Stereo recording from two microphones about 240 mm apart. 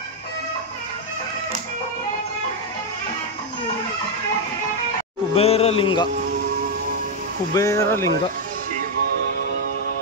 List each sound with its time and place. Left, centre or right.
5.3 s a man's voice: left
7.5 s speech: centre